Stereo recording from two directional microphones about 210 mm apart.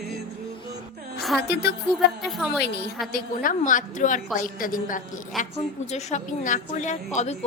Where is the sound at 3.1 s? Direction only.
40° left (ahead or behind).